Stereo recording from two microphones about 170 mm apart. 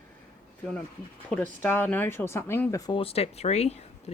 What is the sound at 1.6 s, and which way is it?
Speech, 10° left (ahead or behind).